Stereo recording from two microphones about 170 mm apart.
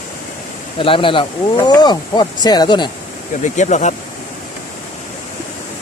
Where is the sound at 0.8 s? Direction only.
30° left (ahead or behind).